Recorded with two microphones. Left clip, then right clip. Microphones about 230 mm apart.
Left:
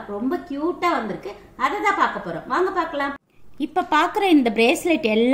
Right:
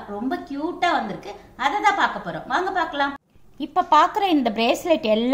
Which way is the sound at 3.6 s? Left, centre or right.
Right.